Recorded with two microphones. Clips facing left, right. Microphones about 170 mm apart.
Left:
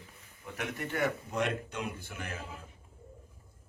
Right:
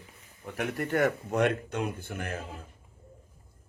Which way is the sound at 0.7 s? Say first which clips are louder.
Right 6 dB; 55° right (ahead or behind).